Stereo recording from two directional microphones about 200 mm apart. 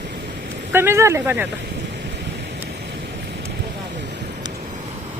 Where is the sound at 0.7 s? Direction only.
10° right (ahead or behind).